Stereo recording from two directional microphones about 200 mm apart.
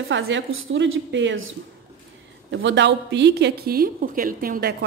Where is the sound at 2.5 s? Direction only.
60° right (ahead or behind).